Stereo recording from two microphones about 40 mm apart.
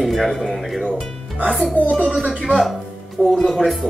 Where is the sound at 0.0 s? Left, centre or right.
Centre.